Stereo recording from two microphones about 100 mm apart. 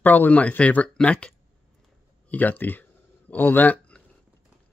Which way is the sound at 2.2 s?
15° left (ahead or behind).